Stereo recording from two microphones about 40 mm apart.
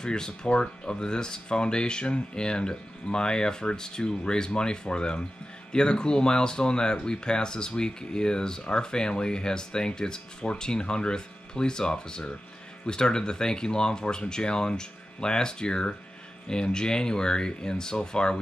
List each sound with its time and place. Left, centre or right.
0.0 s speech: centre